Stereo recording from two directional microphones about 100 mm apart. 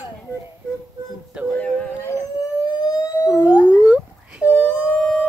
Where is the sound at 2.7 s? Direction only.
40° left (ahead or behind).